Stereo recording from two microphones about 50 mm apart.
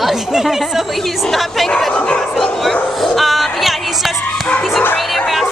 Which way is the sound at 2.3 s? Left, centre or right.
Centre.